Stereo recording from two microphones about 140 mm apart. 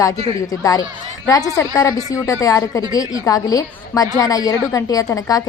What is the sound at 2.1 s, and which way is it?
A woman's voice, 25° left (ahead or behind).